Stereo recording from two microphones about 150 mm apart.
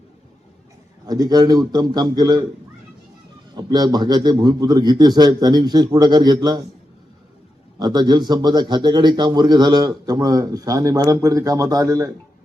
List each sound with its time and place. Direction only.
1.0 s a man's voice: 25° right (ahead or behind)
3.5 s a man's voice: 25° right (ahead or behind)
7.8 s a man's voice: 30° right (ahead or behind)